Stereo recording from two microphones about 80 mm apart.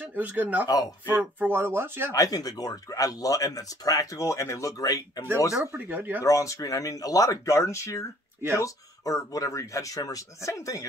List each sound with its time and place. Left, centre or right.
0.0 s speech: right
2.1 s speech: left
5.7 s speech: right
6.2 s speech: left